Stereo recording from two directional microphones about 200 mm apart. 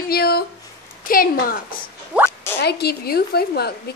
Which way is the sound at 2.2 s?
10° left (ahead or behind).